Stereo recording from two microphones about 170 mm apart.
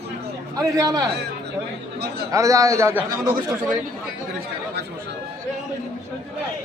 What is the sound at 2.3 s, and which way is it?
Speech, 20° right (ahead or behind).